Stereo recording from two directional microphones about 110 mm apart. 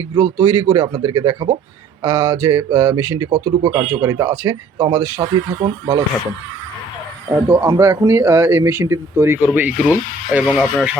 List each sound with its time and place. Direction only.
0.3 s speech: 30° right (ahead or behind)
5.2 s speech: 45° right (ahead or behind)
7.3 s speech: 40° right (ahead or behind)
7.8 s speech: 25° right (ahead or behind)
10.4 s speech: 5° right (ahead or behind)